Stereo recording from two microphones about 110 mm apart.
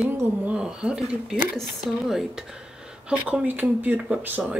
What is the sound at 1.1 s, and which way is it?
Speech, 10° right (ahead or behind).